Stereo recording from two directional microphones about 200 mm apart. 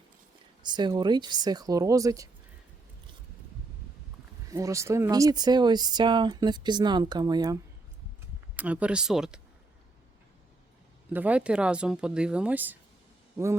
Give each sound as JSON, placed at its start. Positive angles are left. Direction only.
{"t": 0.6, "sound": "speech", "side_deg": -20}
{"t": 4.4, "sound": "speech", "side_deg": -15}
{"t": 8.5, "sound": "speech", "side_deg": -5}
{"t": 11.1, "sound": "speech", "side_deg": -10}